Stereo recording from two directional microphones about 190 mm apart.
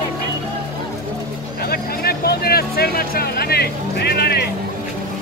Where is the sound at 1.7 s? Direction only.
55° left (ahead or behind).